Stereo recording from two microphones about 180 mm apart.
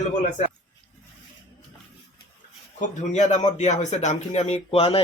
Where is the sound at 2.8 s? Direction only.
40° left (ahead or behind).